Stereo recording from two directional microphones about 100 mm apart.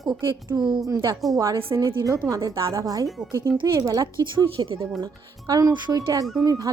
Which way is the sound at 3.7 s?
35° right (ahead or behind).